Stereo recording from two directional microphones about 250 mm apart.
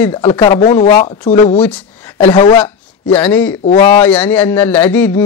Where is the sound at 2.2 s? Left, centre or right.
Left; by 3.6 s centre.